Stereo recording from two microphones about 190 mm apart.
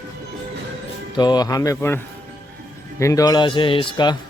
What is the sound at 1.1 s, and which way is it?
Speech, 20° left (ahead or behind).